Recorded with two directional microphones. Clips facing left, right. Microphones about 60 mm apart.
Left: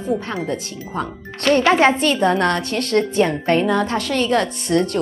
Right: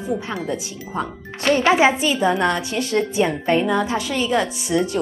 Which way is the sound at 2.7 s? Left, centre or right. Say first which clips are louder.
Left 1 dB; left.